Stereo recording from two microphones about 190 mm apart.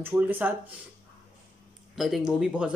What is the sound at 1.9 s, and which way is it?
Speech, centre (ahead or behind).